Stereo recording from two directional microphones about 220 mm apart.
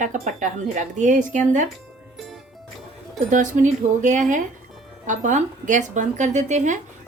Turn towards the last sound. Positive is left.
turn(degrees=-35)  # may be behind; listen again after turning